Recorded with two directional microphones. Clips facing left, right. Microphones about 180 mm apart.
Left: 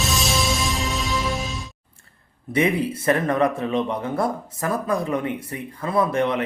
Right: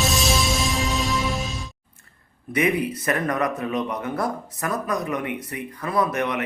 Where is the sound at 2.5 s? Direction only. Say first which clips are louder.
Left 1 dB; 25° left (ahead or behind).